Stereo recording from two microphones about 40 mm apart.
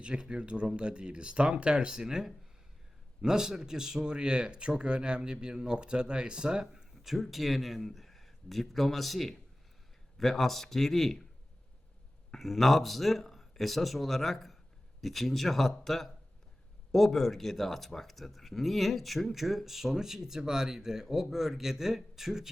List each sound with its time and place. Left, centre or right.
0.0 s speech: right
7.0 s a man's voice: centre
12.3 s speech: centre